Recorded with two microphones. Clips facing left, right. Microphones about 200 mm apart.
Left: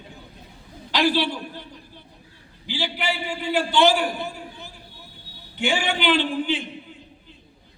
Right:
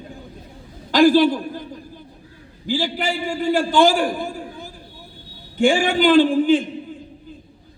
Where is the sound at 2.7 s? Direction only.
50° right (ahead or behind).